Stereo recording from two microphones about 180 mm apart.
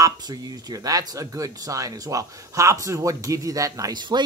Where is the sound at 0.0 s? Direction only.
20° right (ahead or behind).